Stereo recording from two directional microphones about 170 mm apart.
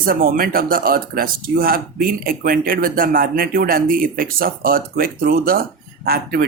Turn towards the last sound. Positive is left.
turn(degrees=-60)  # may be behind; listen again after turning